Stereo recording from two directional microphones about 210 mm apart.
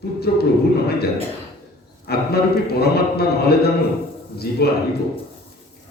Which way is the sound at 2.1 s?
50° left (ahead or behind).